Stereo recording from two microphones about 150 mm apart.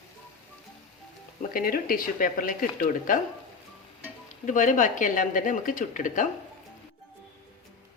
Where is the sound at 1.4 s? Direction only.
70° left (ahead or behind).